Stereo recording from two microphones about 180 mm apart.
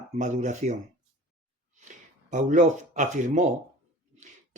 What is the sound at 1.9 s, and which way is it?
Speech, 45° right (ahead or behind).